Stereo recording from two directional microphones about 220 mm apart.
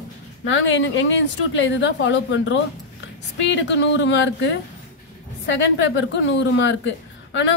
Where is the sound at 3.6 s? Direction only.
55° left (ahead or behind).